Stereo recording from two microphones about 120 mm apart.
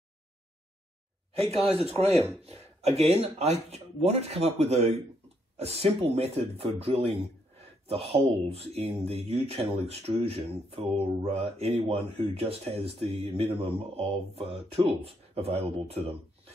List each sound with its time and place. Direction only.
1.6 s speech: centre (ahead or behind)
2.4 s speech: 60° right (ahead or behind)